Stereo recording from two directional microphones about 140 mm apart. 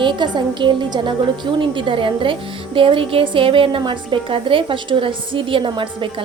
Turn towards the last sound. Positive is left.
turn(degrees=-35)  # may be behind; listen again after turning